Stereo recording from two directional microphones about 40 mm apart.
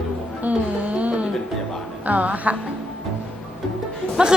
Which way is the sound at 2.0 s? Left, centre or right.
Right.